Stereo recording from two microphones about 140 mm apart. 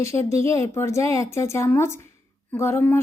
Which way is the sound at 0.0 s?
20° left (ahead or behind).